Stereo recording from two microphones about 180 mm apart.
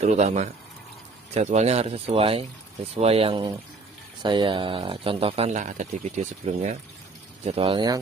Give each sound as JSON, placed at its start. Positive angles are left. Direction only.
{"t": 0.0, "sound": "speech", "side_deg": -40}